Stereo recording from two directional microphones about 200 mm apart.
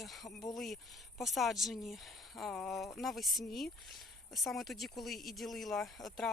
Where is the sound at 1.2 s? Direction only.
Centre (ahead or behind).